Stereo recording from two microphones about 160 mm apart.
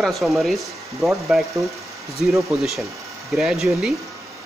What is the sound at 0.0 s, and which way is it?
Speech, centre (ahead or behind).